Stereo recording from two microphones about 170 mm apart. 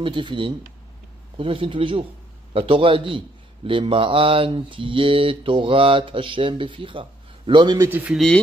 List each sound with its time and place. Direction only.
0.0 s a man's voice: 30° right (ahead or behind)
7.9 s speech: 5° right (ahead or behind)